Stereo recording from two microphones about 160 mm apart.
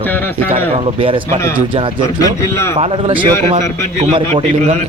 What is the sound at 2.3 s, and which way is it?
Speech, 15° left (ahead or behind).